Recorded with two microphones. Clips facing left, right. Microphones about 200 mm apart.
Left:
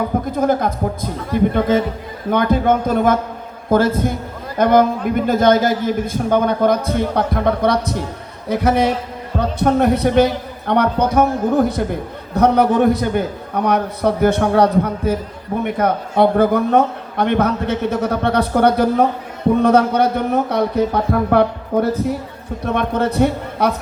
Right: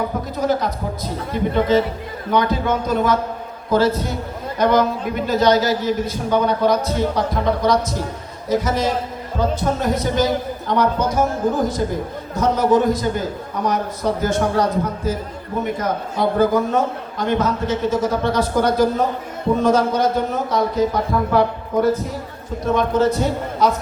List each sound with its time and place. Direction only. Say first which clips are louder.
0.3 s a man's voice: left 3 dB; 50° left (ahead or behind)
22.6 s a man's voice: right 2 dB; 60° left (ahead or behind)